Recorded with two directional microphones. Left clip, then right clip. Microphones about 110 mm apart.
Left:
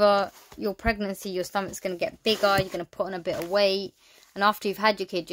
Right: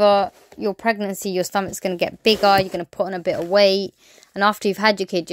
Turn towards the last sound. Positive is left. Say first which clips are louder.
# right 6 dB
turn(degrees=-45)  # may be behind; listen again after turning